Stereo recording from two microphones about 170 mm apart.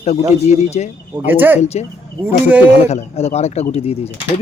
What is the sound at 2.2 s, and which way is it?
Speech, 10° right (ahead or behind).